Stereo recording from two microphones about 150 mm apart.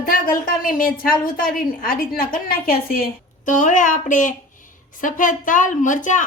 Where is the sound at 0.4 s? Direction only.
70° left (ahead or behind).